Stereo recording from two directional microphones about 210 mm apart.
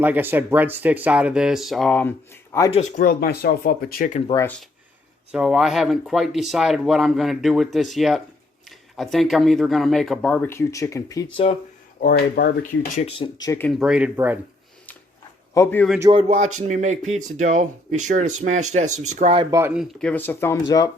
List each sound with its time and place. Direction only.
0.0 s speech: 10° right (ahead or behind); by 2.7 s 10° left (ahead or behind)
2.7 s speech: 35° left (ahead or behind)
4.3 s speech: 15° left (ahead or behind)
5.3 s speech: centre (ahead or behind); by 11.4 s 15° left (ahead or behind)
12.0 s speech: 50° left (ahead or behind)
13.0 s speech: 25° left (ahead or behind)
13.5 s speech: 10° left (ahead or behind)
13.7 s speech: 5° right (ahead or behind)
15.5 s speech: 10° left (ahead or behind)
16.0 s speech: 15° right (ahead or behind)
16.6 s speech: 35° right (ahead or behind)
18.9 s speech: 90° right
19.1 s speech: 30° right (ahead or behind); by 20.9 s 15° left (ahead or behind)